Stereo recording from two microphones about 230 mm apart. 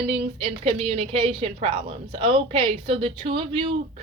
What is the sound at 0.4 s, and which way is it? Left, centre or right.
A woman's voice, right.